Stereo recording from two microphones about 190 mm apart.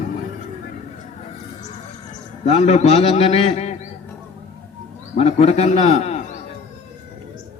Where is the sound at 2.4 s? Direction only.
35° left (ahead or behind).